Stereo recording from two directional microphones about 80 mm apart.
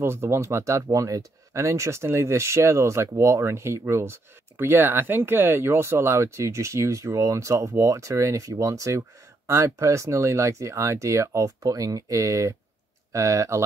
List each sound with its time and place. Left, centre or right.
0.0 s speech: right